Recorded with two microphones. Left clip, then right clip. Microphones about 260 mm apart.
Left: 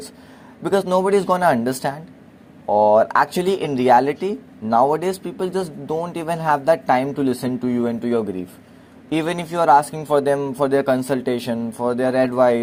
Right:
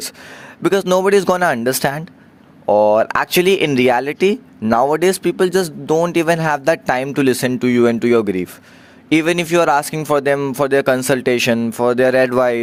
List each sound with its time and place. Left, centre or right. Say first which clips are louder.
0.6 s a man's voice: right 4 dB; right
3.4 s speech: right 7 dB; right
3.7 s a man's voice: even; right